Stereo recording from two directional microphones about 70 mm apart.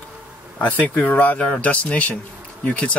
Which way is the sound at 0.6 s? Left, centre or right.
Left.